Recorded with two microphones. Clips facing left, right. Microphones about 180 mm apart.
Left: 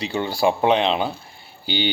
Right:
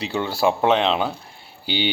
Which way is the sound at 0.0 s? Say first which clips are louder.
Even; 5° right (ahead or behind).